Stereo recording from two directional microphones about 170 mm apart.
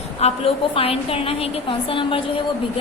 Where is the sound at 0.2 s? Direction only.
35° left (ahead or behind).